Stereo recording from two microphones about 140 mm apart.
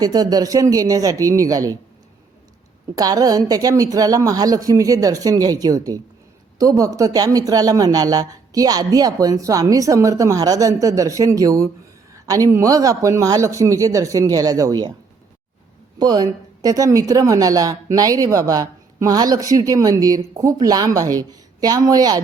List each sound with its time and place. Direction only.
0.0 s speech: 25° right (ahead or behind)
2.9 s speech: 25° right (ahead or behind)
16.0 s speech: 30° right (ahead or behind)